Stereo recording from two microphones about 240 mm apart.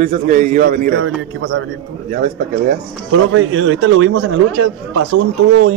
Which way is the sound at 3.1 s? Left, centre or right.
Right.